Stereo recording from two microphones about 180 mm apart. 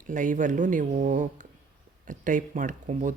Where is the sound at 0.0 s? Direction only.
45° right (ahead or behind).